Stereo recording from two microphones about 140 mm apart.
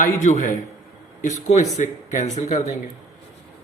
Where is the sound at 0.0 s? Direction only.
60° left (ahead or behind).